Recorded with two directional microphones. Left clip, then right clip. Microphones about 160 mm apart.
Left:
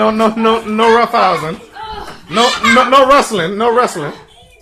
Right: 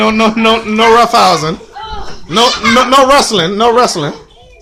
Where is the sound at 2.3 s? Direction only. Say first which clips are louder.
Right 1 dB; 15° right (ahead or behind).